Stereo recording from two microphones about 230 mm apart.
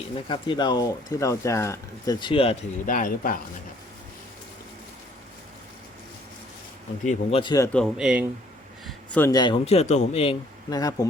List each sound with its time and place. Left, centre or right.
0.3 s speech: centre; by 3.3 s left
7.0 s speech: left
7.7 s speech: centre
8.9 s a sound: centre
9.3 s speech: centre